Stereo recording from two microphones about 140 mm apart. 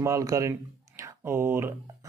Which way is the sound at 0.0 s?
25° right (ahead or behind).